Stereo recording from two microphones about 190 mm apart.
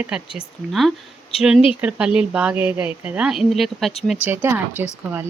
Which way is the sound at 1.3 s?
30° left (ahead or behind).